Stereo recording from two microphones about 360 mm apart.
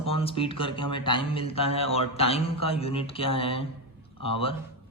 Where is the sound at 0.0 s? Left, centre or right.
Centre.